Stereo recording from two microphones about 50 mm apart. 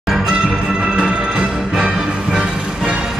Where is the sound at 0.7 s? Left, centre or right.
Centre.